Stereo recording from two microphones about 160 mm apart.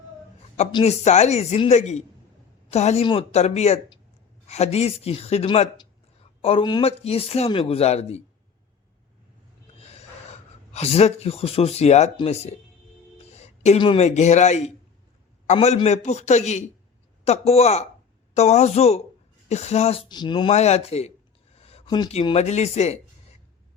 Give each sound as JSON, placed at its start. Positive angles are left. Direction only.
{"t": 0.7, "sound": "speech", "side_deg": 40}
{"t": 5.5, "sound": "speech", "side_deg": 30}
{"t": 9.7, "sound": "a sound", "side_deg": 40}
{"t": 10.7, "sound": "speech", "side_deg": 40}
{"t": 13.3, "sound": "a sound", "side_deg": 40}
{"t": 13.7, "sound": "speech", "side_deg": 35}
{"t": 20.5, "sound": "speech", "side_deg": 45}
{"t": 21.5, "sound": "a sound", "side_deg": 40}
{"t": 22.1, "sound": "speech", "side_deg": 35}